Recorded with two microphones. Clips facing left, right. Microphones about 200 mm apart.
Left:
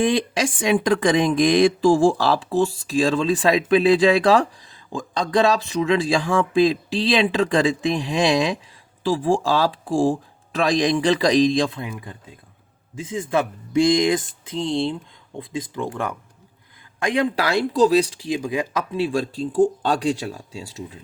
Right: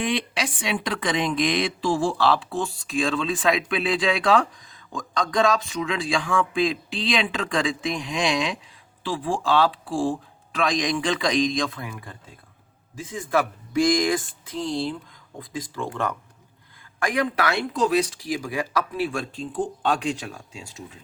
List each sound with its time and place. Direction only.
0.1 s a woman's voice: 45° left (ahead or behind); by 16.1 s 15° left (ahead or behind)
17.0 s a woman's voice: 25° left (ahead or behind)